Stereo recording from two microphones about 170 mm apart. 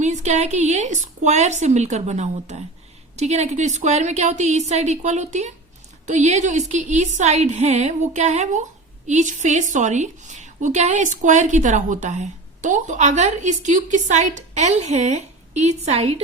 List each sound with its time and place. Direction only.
0.0 s a woman's voice: 45° right (ahead or behind)